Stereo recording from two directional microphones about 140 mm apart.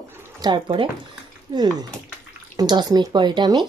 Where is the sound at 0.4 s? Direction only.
35° right (ahead or behind).